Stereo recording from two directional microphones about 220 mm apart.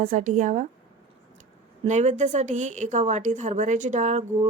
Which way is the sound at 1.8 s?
30° right (ahead or behind).